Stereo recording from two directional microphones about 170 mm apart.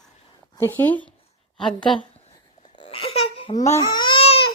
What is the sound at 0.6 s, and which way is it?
Speech, 10° left (ahead or behind).